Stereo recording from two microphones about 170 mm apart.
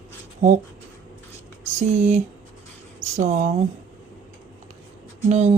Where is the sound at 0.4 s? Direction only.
45° right (ahead or behind).